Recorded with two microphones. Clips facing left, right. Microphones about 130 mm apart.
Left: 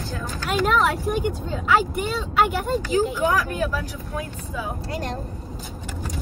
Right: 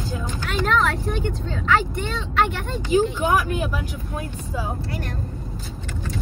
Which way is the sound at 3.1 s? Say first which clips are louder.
Right 1 dB; 15° right (ahead or behind).